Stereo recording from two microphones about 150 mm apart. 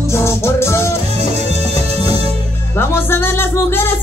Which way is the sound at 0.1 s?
20° left (ahead or behind).